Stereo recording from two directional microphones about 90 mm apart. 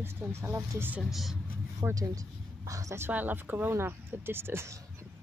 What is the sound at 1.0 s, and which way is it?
Speech, centre (ahead or behind).